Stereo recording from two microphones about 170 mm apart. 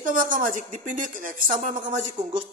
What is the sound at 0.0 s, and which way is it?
Speech, 50° right (ahead or behind).